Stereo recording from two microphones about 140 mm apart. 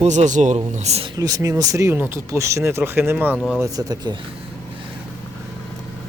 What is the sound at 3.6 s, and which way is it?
Speech, 25° right (ahead or behind).